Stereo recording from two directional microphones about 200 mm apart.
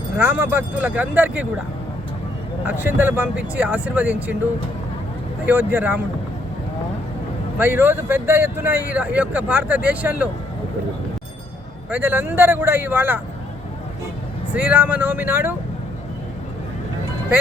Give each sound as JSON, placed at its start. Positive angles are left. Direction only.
{"t": 0.2, "sound": "speech", "side_deg": -10}
{"t": 2.6, "sound": "speech", "side_deg": -10}
{"t": 5.5, "sound": "speech", "side_deg": -10}
{"t": 7.6, "sound": "speech", "side_deg": -10}
{"t": 11.9, "sound": "speech", "side_deg": -10}
{"t": 14.5, "sound": "speech", "side_deg": -10}